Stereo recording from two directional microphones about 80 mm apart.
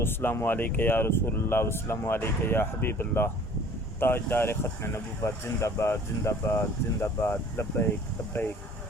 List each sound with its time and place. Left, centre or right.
0.0 s speech: left